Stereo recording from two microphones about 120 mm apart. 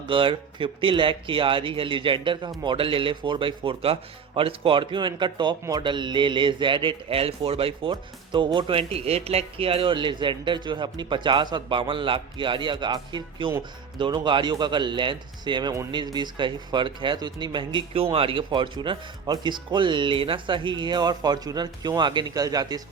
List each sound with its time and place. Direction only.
0.1 s a man's voice: 45° right (ahead or behind)